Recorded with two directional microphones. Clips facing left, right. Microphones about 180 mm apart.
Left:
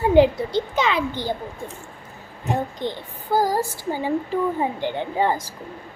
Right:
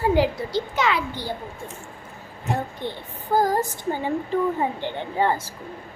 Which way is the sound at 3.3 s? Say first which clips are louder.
Even; 10° left (ahead or behind).